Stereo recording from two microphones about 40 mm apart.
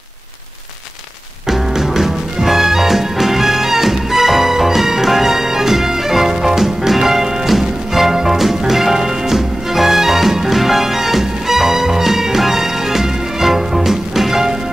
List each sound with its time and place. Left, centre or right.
1.5 s music: centre